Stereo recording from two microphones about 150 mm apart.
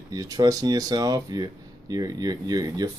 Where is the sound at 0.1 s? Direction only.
25° right (ahead or behind).